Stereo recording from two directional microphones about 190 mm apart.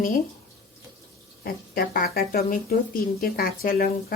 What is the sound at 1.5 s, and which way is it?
Speech, 50° left (ahead or behind).